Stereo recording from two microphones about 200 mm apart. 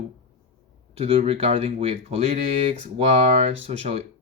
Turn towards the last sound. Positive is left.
turn(degrees=-30)  # may be behind; listen again after turning